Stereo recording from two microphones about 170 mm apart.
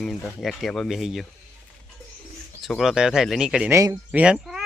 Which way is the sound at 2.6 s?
Centre (ahead or behind).